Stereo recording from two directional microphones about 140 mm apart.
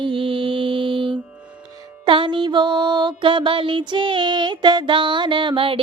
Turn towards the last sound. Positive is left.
turn(degrees=-40)  # may be behind; listen again after turning